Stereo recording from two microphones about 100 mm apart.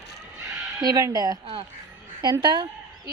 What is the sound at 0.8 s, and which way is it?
Speech, 40° right (ahead or behind).